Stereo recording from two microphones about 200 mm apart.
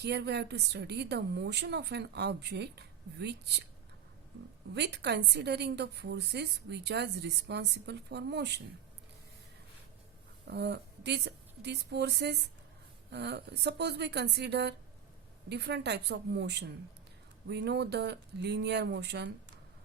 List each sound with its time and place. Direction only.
0.0 s a woman's voice: 55° right (ahead or behind)
4.7 s a woman's voice: 55° right (ahead or behind)
10.4 s a woman's voice: 55° right (ahead or behind)